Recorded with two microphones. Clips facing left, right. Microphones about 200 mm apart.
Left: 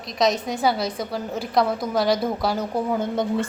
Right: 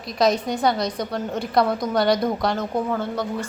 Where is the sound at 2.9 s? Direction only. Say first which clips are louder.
Left 2 dB; 15° left (ahead or behind).